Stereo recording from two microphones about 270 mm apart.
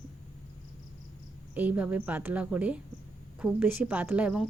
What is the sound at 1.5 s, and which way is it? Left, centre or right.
Speech, centre.